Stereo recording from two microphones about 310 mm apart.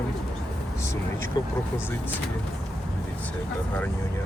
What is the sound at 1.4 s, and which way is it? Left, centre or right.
Speech, centre.